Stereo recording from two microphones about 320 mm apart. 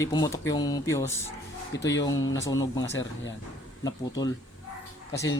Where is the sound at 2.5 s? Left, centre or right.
Centre.